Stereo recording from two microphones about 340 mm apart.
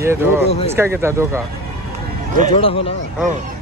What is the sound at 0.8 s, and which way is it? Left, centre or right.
Speech, centre.